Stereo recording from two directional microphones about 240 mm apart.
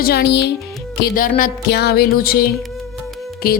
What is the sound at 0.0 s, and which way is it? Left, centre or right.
A woman's voice, left.